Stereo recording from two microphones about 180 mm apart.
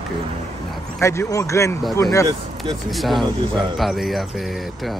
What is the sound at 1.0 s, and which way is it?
Speech, 15° left (ahead or behind).